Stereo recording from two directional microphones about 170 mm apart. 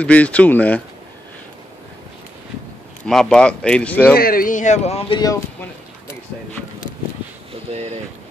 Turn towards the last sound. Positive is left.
turn(degrees=-40)  # may be behind; listen again after turning